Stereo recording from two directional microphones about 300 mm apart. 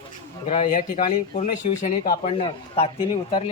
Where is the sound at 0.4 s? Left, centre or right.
Left.